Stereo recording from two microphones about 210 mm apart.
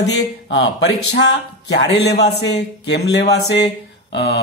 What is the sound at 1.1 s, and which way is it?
Speech, 55° left (ahead or behind).